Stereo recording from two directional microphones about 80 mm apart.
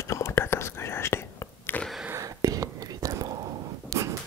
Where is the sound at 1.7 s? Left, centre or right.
Left.